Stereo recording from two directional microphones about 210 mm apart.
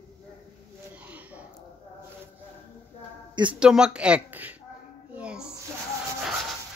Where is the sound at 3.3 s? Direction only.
20° right (ahead or behind).